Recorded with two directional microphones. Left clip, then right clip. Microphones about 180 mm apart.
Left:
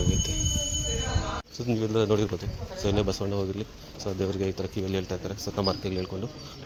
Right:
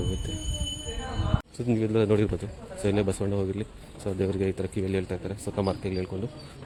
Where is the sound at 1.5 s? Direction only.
30° right (ahead or behind).